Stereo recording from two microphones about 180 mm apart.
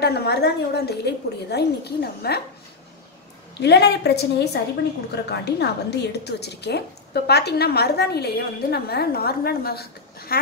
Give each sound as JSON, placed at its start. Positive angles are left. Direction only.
{"t": 0.0, "sound": "a woman's voice", "side_deg": 65}
{"t": 3.6, "sound": "a woman's voice", "side_deg": 70}